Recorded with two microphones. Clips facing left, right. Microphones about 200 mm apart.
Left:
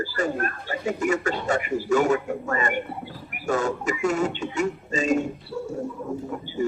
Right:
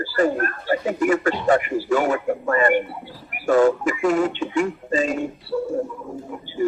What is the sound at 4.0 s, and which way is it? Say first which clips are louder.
Speech: right 3 dB; 45° left (ahead or behind).